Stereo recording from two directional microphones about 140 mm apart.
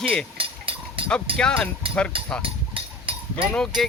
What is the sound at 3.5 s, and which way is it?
Speech, 5° left (ahead or behind).